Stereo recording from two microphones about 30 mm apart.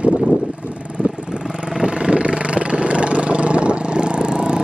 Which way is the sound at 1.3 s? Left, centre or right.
Right.